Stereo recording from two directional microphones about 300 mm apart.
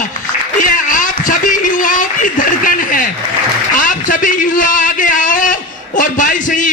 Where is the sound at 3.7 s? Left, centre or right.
Left.